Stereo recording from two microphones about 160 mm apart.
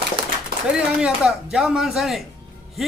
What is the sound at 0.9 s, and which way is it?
Speech, 5° right (ahead or behind).